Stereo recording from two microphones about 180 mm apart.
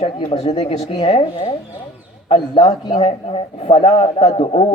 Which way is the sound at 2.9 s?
35° left (ahead or behind).